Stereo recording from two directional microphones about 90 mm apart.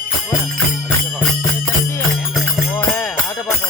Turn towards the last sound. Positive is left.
turn(degrees=20)  # may be behind; listen again after turning